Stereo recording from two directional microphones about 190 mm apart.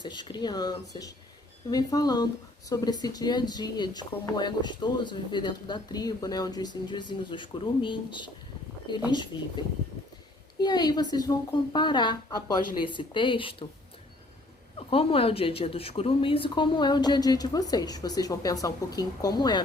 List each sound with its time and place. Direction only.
0.0 s speech: 25° left (ahead or behind)
10.6 s speech: 20° left (ahead or behind)
14.8 s speech: 30° left (ahead or behind)